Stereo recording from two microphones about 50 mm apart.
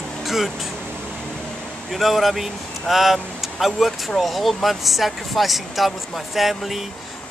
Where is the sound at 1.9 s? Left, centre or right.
Centre.